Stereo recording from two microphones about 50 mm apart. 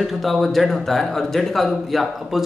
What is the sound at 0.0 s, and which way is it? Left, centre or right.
Speech, centre.